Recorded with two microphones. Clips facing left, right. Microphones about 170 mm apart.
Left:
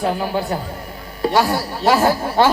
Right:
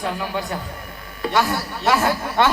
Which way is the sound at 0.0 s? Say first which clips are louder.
Left 5 dB; 35° left (ahead or behind).